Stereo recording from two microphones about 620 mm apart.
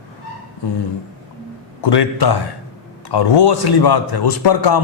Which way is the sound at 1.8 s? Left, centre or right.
Left.